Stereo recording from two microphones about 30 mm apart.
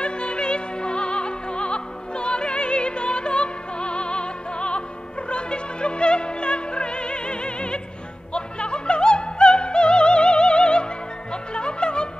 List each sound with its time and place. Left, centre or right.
0.0 s opera: left
11.5 s music: left